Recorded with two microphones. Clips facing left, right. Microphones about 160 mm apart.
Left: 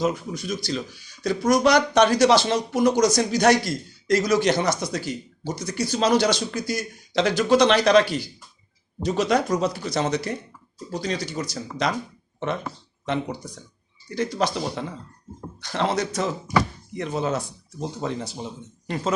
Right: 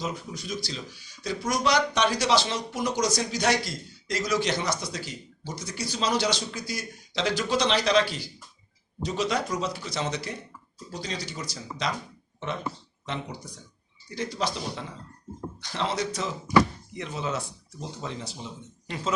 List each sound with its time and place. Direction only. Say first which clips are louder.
0.0 s speech: left 9 dB; 50° left (ahead or behind)
14.2 s speech: left 6 dB; 55° left (ahead or behind)